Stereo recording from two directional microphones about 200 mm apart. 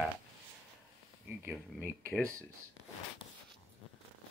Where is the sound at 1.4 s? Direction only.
15° right (ahead or behind).